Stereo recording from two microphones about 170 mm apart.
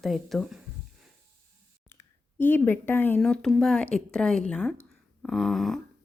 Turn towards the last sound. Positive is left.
turn(degrees=0)  # may be behind; listen again after turning